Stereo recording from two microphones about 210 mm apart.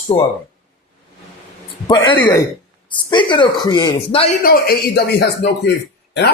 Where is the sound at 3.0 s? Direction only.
20° left (ahead or behind).